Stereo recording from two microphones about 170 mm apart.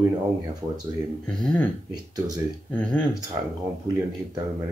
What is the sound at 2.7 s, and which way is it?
Speech, 5° left (ahead or behind).